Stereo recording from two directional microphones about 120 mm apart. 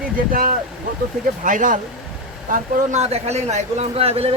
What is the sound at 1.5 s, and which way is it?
Speech, 90° right.